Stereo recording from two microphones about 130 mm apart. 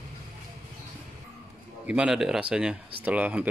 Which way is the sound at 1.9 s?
5° right (ahead or behind).